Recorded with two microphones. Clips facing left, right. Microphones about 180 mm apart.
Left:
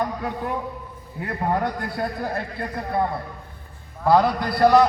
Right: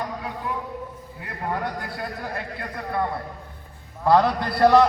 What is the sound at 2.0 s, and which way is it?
Speech, 40° left (ahead or behind).